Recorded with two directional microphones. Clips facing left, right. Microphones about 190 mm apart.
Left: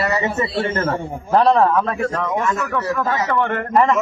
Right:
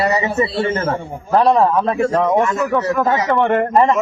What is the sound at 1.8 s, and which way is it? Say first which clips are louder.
A man's voice: right 6 dB; 30° right (ahead or behind).